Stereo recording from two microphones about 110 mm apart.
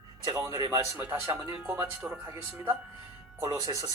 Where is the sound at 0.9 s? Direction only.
15° right (ahead or behind).